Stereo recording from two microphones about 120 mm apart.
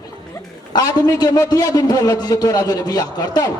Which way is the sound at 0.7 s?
35° left (ahead or behind).